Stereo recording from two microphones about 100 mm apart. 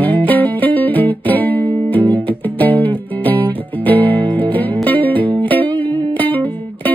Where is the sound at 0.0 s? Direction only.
15° left (ahead or behind).